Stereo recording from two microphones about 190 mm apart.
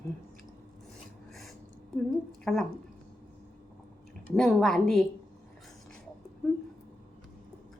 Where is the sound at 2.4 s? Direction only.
Centre (ahead or behind).